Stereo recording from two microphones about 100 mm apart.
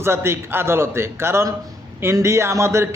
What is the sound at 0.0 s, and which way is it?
A man's voice, 25° right (ahead or behind).